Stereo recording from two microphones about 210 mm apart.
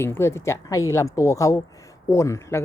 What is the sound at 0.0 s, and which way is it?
Speech, 10° left (ahead or behind).